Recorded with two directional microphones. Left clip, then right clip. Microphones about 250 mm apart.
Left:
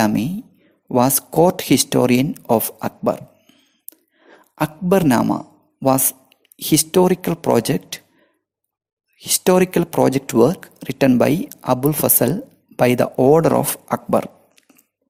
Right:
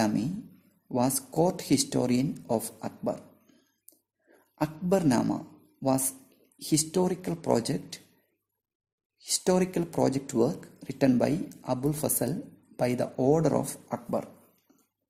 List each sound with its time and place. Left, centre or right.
0.9 s speech: left
9.1 s speech: left